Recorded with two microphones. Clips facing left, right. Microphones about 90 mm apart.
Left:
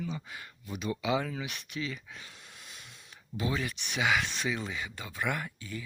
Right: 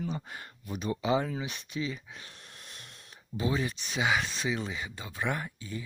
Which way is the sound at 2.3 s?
5° left (ahead or behind).